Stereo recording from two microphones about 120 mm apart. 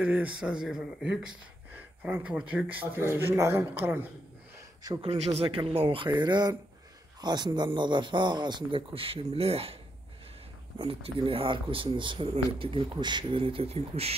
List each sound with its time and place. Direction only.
0.0 s speech: 10° right (ahead or behind)
5.0 s a man's voice: 60° right (ahead or behind)
10.8 s speech: 50° right (ahead or behind)